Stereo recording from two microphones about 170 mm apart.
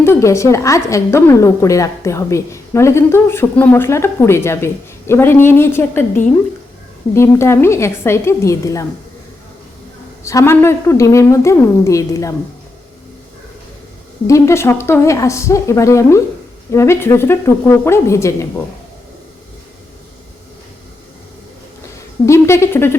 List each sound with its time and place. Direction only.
0.0 s a woman's voice: 15° left (ahead or behind)
10.2 s a woman's voice: 15° left (ahead or behind)
14.3 s a woman's voice: 15° left (ahead or behind)
22.3 s a woman's voice: 15° left (ahead or behind)